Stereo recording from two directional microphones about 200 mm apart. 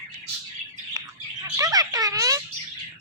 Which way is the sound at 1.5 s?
15° right (ahead or behind).